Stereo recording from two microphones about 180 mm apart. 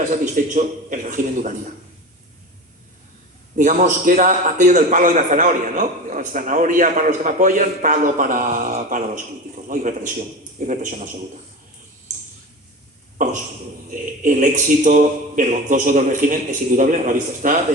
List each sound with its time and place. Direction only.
0.1 s a man's voice: 45° right (ahead or behind)
3.6 s a man's voice: 45° right (ahead or behind)
13.9 s a man's voice: 45° right (ahead or behind)